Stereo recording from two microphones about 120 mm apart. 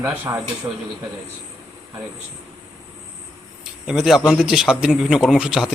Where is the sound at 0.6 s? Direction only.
35° right (ahead or behind).